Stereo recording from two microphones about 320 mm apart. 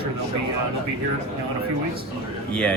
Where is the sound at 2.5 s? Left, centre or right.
Centre.